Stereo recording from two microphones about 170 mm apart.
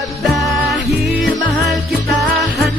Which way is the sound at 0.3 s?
Centre (ahead or behind).